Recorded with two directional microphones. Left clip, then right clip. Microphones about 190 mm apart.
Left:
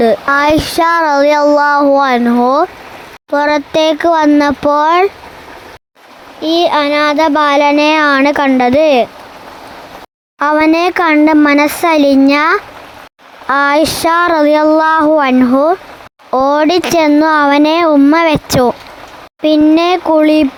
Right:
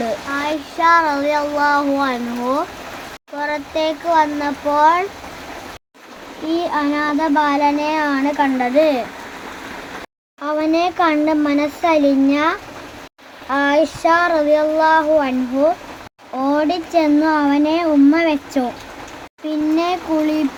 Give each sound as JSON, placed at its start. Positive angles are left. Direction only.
{"t": 0.0, "sound": "a child's voice", "side_deg": 55}
{"t": 6.5, "sound": "a child's voice", "side_deg": 50}
{"t": 10.4, "sound": "a child's voice", "side_deg": 55}
{"t": 19.4, "sound": "a child's voice", "side_deg": 50}